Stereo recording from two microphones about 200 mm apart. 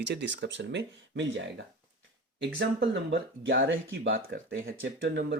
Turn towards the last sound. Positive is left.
turn(degrees=-60)  # may be behind; listen again after turning